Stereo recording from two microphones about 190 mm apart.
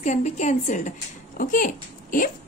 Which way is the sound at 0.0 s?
40° left (ahead or behind).